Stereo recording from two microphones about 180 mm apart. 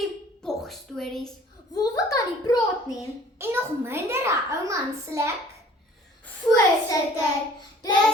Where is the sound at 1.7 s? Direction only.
20° left (ahead or behind).